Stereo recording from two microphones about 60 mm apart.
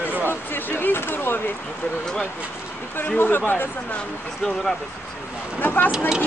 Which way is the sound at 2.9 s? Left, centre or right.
Left.